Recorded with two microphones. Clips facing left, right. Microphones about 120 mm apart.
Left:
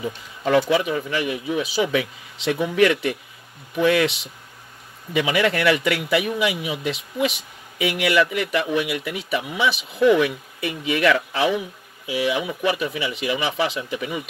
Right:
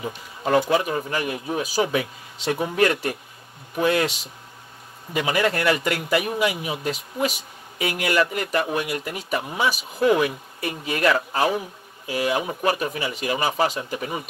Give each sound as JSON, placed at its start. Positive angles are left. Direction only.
{"t": 0.0, "sound": "speech", "side_deg": -45}